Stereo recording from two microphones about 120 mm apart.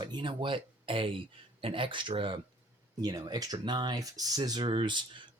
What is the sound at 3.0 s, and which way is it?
Speech, 35° right (ahead or behind).